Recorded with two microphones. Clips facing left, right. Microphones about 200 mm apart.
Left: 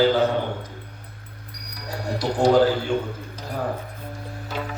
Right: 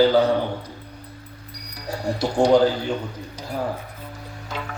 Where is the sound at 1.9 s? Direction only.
30° right (ahead or behind).